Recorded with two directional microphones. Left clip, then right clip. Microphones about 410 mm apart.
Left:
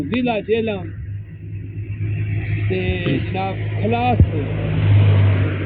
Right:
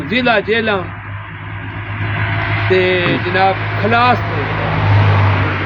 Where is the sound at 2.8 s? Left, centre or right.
Right.